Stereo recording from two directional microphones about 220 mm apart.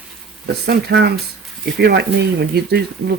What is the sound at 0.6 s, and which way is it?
Speech, 50° right (ahead or behind).